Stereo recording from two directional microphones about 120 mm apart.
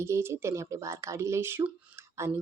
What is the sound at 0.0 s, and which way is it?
Speech, 20° right (ahead or behind).